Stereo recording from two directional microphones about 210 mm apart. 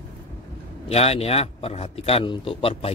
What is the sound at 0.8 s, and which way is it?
A man's voice, 30° left (ahead or behind).